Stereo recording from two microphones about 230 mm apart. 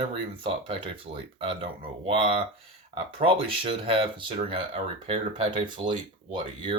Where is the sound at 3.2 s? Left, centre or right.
Right.